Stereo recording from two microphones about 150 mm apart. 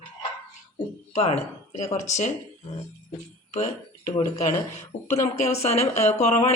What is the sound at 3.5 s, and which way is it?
Speech, 50° left (ahead or behind).